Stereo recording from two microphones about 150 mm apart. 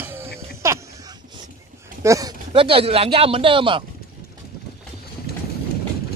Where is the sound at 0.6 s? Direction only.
20° right (ahead or behind).